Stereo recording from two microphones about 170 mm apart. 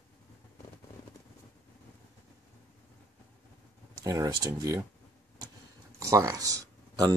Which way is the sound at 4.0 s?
20° right (ahead or behind).